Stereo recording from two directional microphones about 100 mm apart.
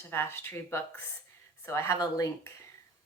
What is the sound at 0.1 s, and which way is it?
A woman's voice, 25° left (ahead or behind).